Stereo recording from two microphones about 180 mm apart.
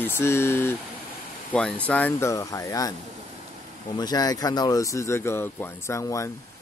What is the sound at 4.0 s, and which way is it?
Speech, 20° left (ahead or behind).